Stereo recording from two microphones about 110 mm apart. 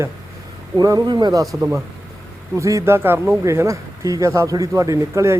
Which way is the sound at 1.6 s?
20° right (ahead or behind).